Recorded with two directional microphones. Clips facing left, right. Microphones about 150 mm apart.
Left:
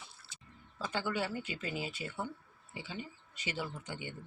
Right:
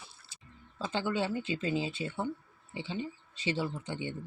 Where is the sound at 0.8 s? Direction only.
20° right (ahead or behind).